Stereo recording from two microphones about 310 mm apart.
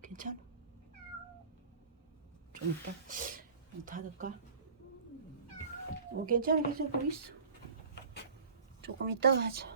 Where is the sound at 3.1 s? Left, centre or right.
Right.